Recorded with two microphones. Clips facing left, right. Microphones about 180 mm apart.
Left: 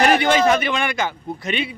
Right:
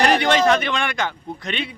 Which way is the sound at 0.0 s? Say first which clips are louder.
Left 1 dB; 5° left (ahead or behind).